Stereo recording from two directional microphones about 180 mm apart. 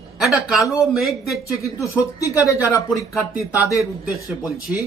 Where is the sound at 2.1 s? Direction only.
20° left (ahead or behind).